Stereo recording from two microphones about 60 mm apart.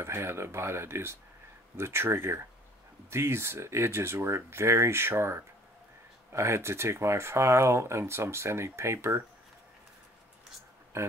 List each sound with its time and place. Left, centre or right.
0.0 s speech: right
10.9 s speech: right